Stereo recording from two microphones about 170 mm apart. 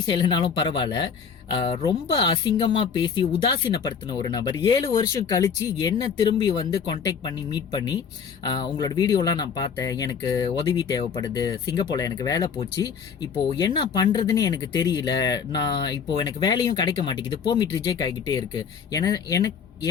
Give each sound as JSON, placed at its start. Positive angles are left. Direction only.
{"t": 0.1, "sound": "speech", "side_deg": 25}
{"t": 13.6, "sound": "speech", "side_deg": 25}